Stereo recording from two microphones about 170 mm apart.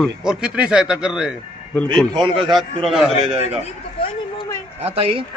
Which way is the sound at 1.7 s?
5° left (ahead or behind).